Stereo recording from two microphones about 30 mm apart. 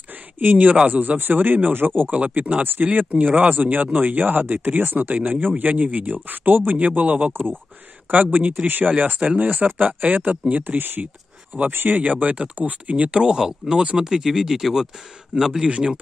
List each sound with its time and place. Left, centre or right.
0.4 s speech: right
0.8 s a man's voice: right
2.2 s speech: right
7.0 s speech: right
8.6 s speech: right
9.8 s speech: right
11.6 s a man's voice: right
12.0 s speech: right
12.9 s speech: right
13.3 s speech: right
15.6 s speech: right